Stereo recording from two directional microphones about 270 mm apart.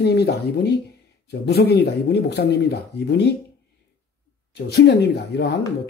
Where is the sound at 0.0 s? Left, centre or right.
Left.